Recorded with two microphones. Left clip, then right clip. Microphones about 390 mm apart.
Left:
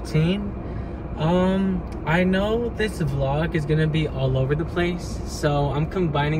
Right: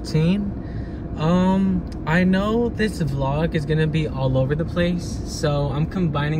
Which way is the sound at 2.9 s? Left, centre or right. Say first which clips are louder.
Even; centre.